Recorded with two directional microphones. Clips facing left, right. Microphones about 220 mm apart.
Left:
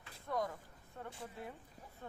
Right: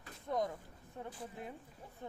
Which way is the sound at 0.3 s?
20° right (ahead or behind).